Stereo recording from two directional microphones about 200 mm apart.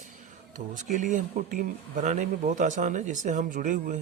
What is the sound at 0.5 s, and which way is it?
Speech, 40° right (ahead or behind).